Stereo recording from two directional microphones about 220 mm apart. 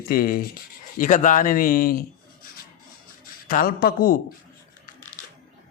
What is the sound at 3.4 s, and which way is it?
Speech, 40° left (ahead or behind).